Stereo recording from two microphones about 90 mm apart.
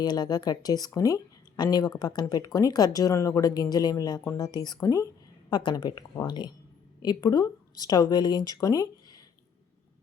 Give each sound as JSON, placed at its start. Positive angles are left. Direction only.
{"t": 0.0, "sound": "speech", "side_deg": 50}
{"t": 5.5, "sound": "a woman's voice", "side_deg": 55}